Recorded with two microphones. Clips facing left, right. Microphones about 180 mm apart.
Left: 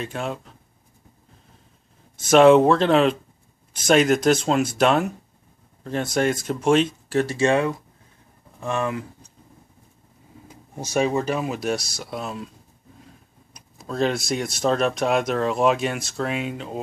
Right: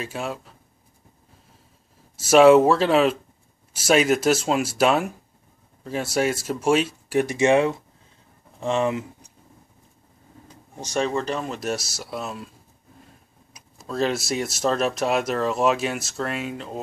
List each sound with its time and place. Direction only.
0.0 s speech: 5° right (ahead or behind)
2.1 s speech: 5° right (ahead or behind); by 9.0 s 20° right (ahead or behind)
10.5 s speech: 10° left (ahead or behind)